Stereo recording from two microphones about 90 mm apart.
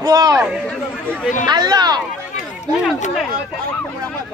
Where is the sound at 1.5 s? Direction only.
50° right (ahead or behind).